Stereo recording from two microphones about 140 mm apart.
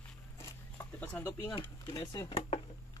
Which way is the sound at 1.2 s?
15° left (ahead or behind).